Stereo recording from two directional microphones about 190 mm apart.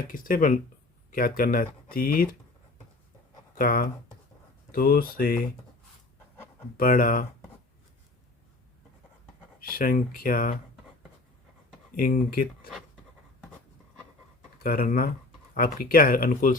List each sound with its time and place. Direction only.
0.1 s speech: 45° left (ahead or behind)
3.5 s speech: 50° left (ahead or behind)
6.7 s speech: 50° left (ahead or behind)
9.6 s speech: 50° left (ahead or behind)
11.9 s speech: 50° left (ahead or behind)
14.6 s speech: 50° left (ahead or behind)